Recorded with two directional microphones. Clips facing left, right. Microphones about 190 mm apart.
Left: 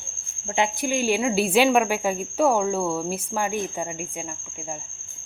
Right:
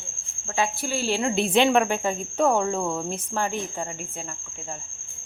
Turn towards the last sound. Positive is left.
turn(degrees=10)  # may be behind; listen again after turning